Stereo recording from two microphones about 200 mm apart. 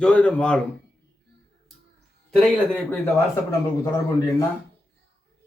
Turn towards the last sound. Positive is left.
turn(degrees=15)  # may be behind; listen again after turning